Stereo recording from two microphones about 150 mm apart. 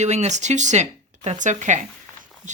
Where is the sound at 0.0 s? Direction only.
50° right (ahead or behind).